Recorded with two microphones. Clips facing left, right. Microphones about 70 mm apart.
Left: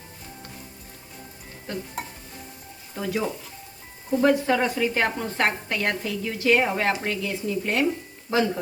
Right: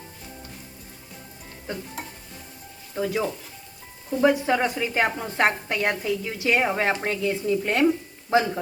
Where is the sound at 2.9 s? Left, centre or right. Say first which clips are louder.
Right 2 dB; centre.